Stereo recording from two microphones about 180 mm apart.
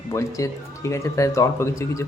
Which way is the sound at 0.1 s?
15° left (ahead or behind).